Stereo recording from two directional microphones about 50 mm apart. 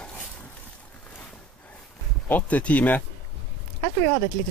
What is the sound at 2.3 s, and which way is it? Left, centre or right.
Speech, left.